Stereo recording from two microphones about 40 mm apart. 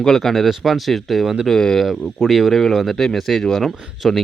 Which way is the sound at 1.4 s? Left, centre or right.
Centre.